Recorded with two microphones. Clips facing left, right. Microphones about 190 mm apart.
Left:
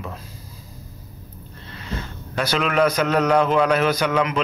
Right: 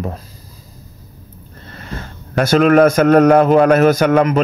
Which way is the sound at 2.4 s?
45° right (ahead or behind).